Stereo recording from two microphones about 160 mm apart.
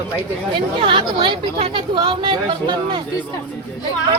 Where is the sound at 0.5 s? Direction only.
30° right (ahead or behind).